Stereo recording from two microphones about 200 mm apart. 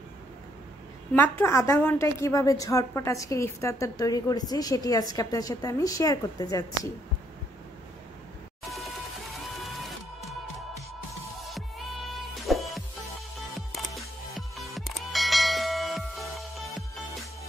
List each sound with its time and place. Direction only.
1.1 s a woman's voice: 10° left (ahead or behind)
9.8 s music: centre (ahead or behind)
12.1 s music: centre (ahead or behind)